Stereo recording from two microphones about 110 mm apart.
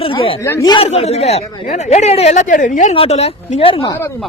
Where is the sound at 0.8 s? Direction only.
70° left (ahead or behind).